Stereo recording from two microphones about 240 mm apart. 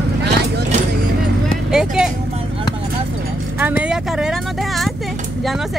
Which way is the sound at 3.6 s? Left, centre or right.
Centre.